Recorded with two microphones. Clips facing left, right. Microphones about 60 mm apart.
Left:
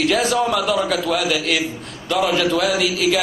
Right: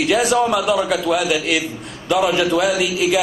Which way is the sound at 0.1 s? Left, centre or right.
Centre.